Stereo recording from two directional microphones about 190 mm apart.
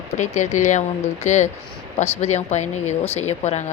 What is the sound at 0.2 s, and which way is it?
Speech, 40° left (ahead or behind).